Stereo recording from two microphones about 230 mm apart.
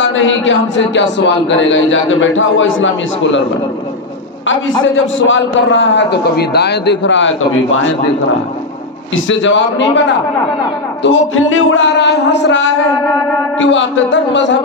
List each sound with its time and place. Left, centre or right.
0.0 s a man's voice: left
4.8 s a man's voice: left
9.1 s a man's voice: left
11.0 s a man's voice: left